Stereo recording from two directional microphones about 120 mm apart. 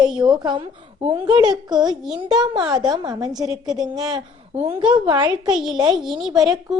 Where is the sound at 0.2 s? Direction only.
40° right (ahead or behind).